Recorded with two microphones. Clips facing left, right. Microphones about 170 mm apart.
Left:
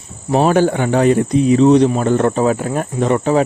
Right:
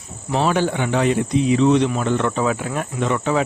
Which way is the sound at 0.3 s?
45° left (ahead or behind).